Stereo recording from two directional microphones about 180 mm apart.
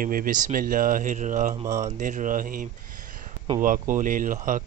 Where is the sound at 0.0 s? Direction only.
50° right (ahead or behind).